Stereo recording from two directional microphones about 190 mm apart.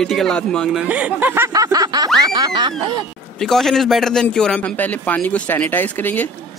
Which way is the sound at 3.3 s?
Centre (ahead or behind).